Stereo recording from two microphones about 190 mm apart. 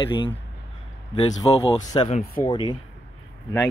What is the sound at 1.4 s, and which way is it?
Speech, 20° left (ahead or behind).